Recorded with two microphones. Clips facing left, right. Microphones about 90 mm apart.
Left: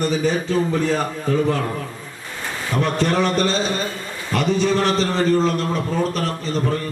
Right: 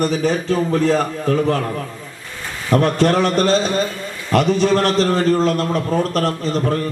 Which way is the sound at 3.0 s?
40° right (ahead or behind).